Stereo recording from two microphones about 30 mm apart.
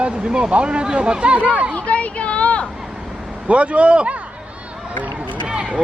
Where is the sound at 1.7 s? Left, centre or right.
Left.